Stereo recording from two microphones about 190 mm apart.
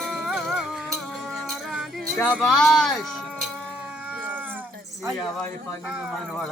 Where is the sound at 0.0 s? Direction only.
Centre (ahead or behind).